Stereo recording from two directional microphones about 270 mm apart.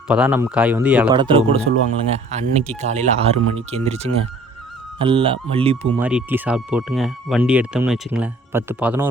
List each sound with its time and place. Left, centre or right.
0.1 s speech: centre
1.1 s speech: centre
6.0 s speech: centre